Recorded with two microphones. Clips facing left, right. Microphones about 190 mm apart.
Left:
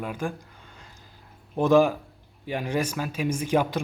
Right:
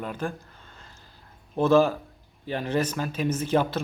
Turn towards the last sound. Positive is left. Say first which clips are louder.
# even
turn(degrees=15)  # may be behind; listen again after turning